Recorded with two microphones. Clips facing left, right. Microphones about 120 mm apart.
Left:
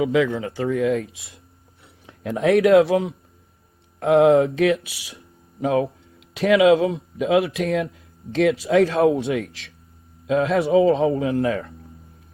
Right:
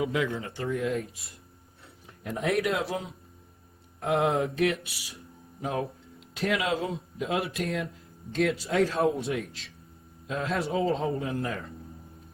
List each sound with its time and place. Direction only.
0.3 s speech: 90° left
4.0 s speech: 90° left
10.2 s speech: 90° left